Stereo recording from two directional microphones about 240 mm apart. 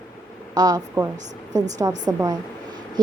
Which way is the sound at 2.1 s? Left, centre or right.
Centre.